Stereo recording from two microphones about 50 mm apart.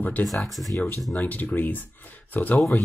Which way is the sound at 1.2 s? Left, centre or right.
Left.